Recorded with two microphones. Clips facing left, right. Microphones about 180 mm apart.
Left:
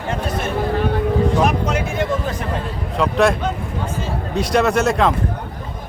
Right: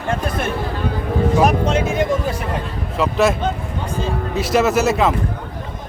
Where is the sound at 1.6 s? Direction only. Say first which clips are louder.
Right 3 dB; 20° right (ahead or behind).